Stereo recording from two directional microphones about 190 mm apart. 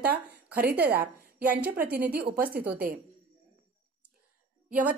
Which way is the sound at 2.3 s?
50° right (ahead or behind).